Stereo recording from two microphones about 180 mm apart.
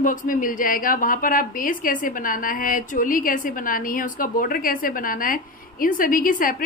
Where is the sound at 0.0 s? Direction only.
45° left (ahead or behind).